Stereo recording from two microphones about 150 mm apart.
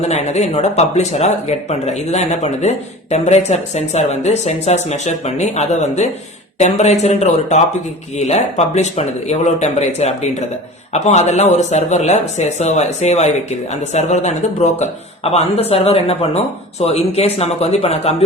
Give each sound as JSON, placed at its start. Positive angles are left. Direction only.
{"t": 0.0, "sound": "speech", "side_deg": 45}